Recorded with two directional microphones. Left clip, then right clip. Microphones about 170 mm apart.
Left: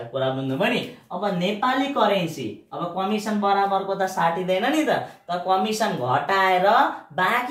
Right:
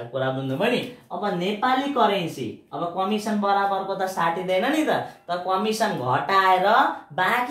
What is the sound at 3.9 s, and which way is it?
Speech, 15° right (ahead or behind).